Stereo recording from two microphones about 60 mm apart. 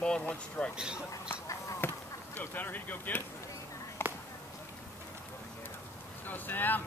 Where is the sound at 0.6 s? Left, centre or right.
Left.